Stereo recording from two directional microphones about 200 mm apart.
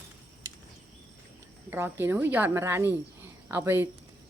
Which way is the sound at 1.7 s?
10° right (ahead or behind).